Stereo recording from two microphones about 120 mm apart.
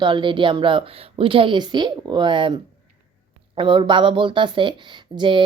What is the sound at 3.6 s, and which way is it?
A woman's voice, 40° right (ahead or behind).